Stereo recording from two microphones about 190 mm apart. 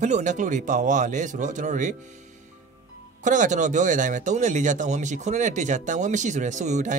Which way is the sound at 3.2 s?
40° right (ahead or behind).